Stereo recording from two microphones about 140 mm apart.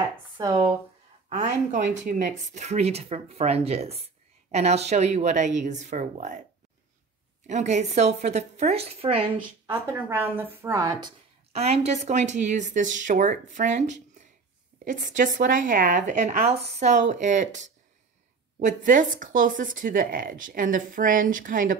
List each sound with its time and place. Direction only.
1.3 s speech: 60° right (ahead or behind)
7.4 s speech: 55° right (ahead or behind)
9.7 s a woman's voice: 15° right (ahead or behind)
11.5 s speech: 50° right (ahead or behind); by 21.7 s 75° right (ahead or behind)